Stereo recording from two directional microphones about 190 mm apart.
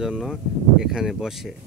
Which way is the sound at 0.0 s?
Centre (ahead or behind).